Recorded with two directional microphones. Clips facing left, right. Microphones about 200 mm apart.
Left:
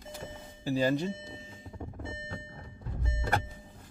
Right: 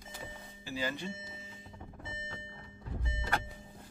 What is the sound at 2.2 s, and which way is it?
Music, 40° left (ahead or behind).